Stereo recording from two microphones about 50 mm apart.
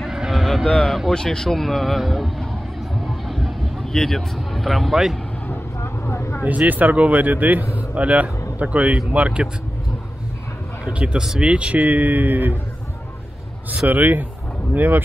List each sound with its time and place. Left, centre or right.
0.0 s a sound: centre
0.7 s a man's voice: centre
3.0 s vehicle: centre
5.5 s vehicle: left
6.4 s speech: right
10.9 s speech: right
11.1 s speech: centre
11.5 s speech: right
13.8 s speech: right